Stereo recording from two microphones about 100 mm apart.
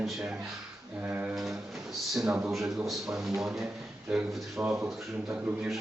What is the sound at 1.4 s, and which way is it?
Speech, centre (ahead or behind).